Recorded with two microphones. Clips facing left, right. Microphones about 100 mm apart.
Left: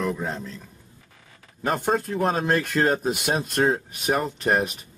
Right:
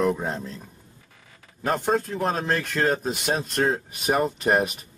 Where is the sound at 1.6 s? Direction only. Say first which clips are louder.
Even; centre (ahead or behind).